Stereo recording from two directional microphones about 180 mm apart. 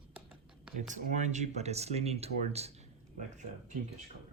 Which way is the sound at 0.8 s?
40° right (ahead or behind).